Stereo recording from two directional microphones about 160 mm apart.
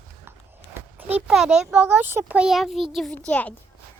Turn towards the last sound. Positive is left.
turn(degrees=10)  # may be behind; listen again after turning